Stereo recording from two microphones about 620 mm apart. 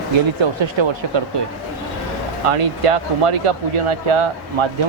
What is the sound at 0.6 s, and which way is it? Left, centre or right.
Speech, right.